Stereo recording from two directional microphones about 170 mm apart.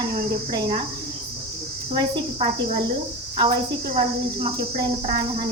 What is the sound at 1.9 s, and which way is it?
Cricket, 30° right (ahead or behind).